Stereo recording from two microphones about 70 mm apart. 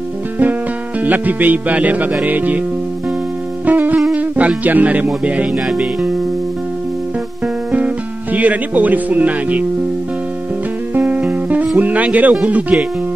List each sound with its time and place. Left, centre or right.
1.0 s speech: right
3.6 s music: right
4.1 s speech: centre
7.4 s music: centre
11.0 s music: right
12.4 s speech: right